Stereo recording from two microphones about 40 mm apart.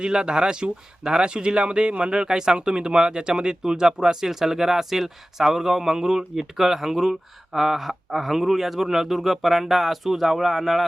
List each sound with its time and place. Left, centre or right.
0.0 s speech: right; by 10.8 s centre